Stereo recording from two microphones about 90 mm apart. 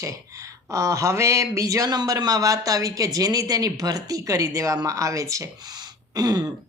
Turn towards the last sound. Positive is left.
turn(degrees=-45)  # may be behind; listen again after turning